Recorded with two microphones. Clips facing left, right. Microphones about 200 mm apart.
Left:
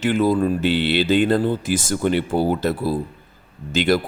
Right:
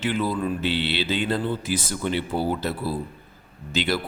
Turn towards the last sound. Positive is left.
turn(degrees=50)  # may be behind; listen again after turning